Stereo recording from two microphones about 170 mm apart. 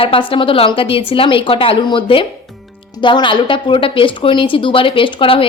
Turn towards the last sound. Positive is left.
turn(degrees=30)  # may be behind; listen again after turning